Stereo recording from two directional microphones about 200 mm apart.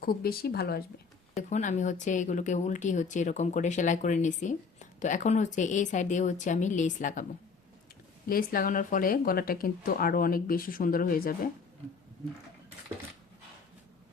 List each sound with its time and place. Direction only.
0.0 s speech: 50° left (ahead or behind)
1.4 s a woman's voice: 35° left (ahead or behind)
8.3 s speech: 45° left (ahead or behind)